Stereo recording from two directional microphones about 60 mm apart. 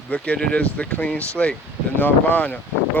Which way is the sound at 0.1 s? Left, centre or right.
Centre.